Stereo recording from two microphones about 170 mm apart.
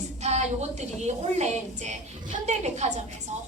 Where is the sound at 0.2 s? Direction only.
40° right (ahead or behind).